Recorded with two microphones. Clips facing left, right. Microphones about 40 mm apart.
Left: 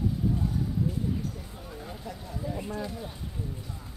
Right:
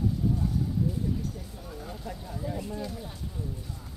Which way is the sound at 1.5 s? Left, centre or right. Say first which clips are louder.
Even; centre.